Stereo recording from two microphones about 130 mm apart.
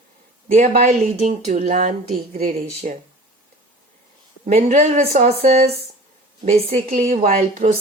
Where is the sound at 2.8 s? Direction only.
70° right (ahead or behind).